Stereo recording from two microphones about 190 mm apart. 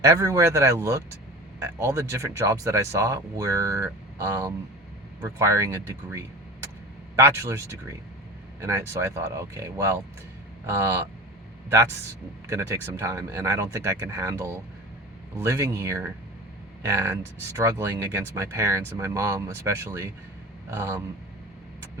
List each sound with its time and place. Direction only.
0.0 s speech: 15° right (ahead or behind)
12.5 s speech: 15° right (ahead or behind)